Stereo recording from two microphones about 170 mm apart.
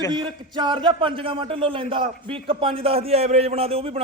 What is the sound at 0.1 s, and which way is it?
A man's voice, 25° right (ahead or behind).